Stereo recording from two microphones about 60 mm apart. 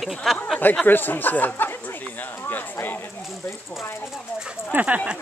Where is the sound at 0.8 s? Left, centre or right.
Left.